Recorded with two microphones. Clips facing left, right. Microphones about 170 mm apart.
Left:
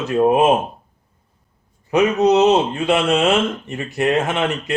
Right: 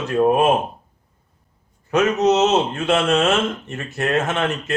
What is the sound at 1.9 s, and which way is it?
A man's voice, 15° left (ahead or behind).